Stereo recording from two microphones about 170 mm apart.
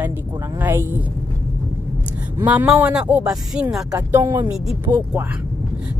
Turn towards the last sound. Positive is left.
turn(degrees=-15)  # may be behind; listen again after turning